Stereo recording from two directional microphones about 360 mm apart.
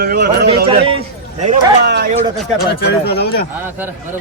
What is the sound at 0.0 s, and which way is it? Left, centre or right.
Speech, right.